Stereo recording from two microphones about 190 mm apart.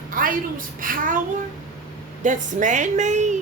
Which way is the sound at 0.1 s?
45° right (ahead or behind).